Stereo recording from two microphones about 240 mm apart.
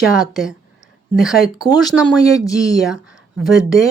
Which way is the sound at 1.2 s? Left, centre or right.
Centre.